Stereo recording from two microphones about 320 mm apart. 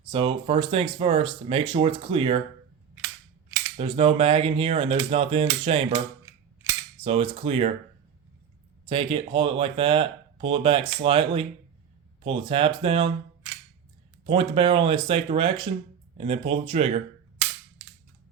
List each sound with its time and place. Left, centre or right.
0.1 s speech: centre
3.8 s speech: centre
7.0 s speech: centre
8.9 s speech: centre
14.3 s speech: centre